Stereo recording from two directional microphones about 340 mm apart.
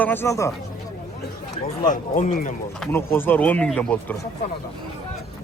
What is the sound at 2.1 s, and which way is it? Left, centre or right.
Speech, left.